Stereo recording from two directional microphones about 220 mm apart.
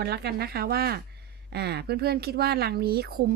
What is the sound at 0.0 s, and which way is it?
Speech, 45° right (ahead or behind).